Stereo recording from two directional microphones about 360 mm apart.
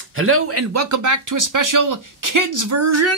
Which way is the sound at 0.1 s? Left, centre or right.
Right.